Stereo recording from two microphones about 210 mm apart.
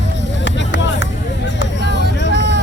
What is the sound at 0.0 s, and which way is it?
Music, 60° left (ahead or behind).